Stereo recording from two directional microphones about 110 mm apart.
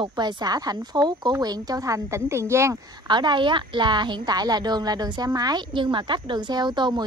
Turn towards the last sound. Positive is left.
turn(degrees=-40)  # may be behind; listen again after turning